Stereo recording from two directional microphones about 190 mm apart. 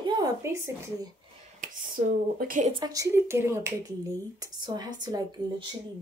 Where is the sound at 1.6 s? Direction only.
45° right (ahead or behind).